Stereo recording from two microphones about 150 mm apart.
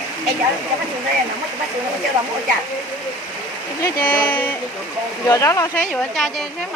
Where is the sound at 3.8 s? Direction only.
15° left (ahead or behind).